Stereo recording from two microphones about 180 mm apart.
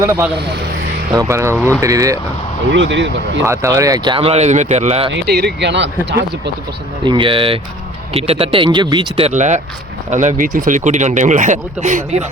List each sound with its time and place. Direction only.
1.1 s speech: 20° right (ahead or behind)
2.7 s speech: 90° right
3.4 s speech: 15° right (ahead or behind); by 5.1 s 35° right (ahead or behind)
5.1 s speech: 65° right (ahead or behind)
7.0 s speech: 25° right (ahead or behind); by 12.3 s 40° right (ahead or behind)